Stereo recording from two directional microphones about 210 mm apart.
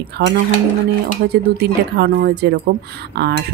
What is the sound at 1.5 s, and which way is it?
Speech, 50° right (ahead or behind).